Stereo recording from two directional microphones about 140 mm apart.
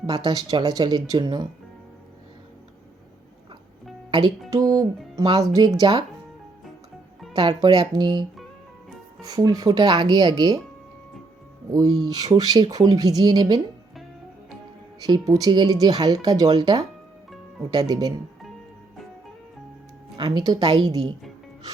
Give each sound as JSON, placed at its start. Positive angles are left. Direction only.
{"t": 0.0, "sound": "speech", "side_deg": -30}
{"t": 4.1, "sound": "speech", "side_deg": -30}
{"t": 7.3, "sound": "speech", "side_deg": -30}
{"t": 9.2, "sound": "speech", "side_deg": -30}
{"t": 12.1, "sound": "speech", "side_deg": -30}
{"t": 15.0, "sound": "speech", "side_deg": -25}
{"t": 20.1, "sound": "speech", "side_deg": -30}